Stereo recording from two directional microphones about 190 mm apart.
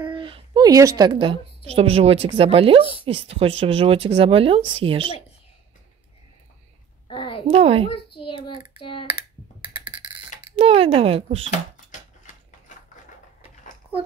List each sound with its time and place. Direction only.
0.1 s a woman's voice: 25° right (ahead or behind)
7.1 s a sound: 25° left (ahead or behind)
7.4 s speech: 30° right (ahead or behind)
8.2 s child singing: 25° left (ahead or behind)
9.0 s computer keyboard: 25° right (ahead or behind)
10.5 s speech: 30° right (ahead or behind)
11.5 s a sound: 40° left (ahead or behind)